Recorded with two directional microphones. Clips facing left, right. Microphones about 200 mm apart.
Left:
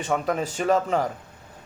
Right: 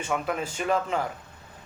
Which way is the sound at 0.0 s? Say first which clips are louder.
Left 4 dB; 35° left (ahead or behind).